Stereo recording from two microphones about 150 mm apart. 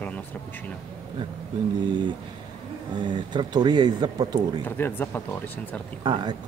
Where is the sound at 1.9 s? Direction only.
30° right (ahead or behind).